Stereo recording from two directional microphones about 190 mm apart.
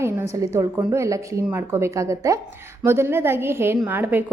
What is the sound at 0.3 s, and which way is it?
A woman's voice, 15° right (ahead or behind).